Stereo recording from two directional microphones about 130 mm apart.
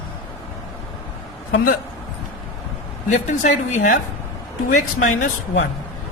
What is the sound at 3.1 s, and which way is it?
Speech, 80° left.